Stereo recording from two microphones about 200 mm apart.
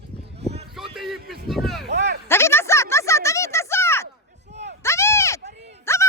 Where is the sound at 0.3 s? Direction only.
30° right (ahead or behind).